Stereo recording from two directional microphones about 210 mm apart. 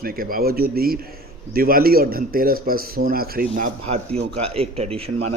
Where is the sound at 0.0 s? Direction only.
45° right (ahead or behind).